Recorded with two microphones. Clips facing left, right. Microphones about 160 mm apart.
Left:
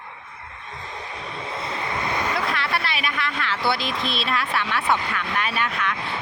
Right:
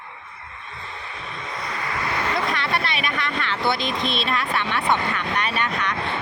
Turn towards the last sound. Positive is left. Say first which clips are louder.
# right 1 dB
turn(degrees=5)  # may be behind; listen again after turning